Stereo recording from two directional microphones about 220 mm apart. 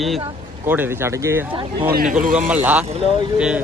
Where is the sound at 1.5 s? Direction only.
20° right (ahead or behind).